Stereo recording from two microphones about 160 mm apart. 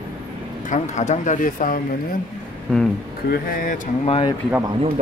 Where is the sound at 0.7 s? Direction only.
45° left (ahead or behind).